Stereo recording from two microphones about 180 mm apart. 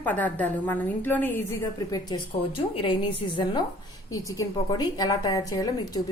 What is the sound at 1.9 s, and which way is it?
A woman's voice, 25° left (ahead or behind).